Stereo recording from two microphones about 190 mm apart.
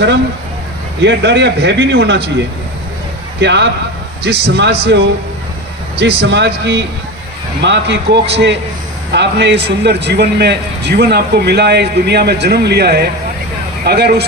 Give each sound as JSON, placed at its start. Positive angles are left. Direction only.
{"t": 1.0, "sound": "speech", "side_deg": -65}
{"t": 3.3, "sound": "a man's voice", "side_deg": -65}